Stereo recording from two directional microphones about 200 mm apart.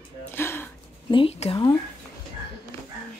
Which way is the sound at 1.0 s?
25° left (ahead or behind).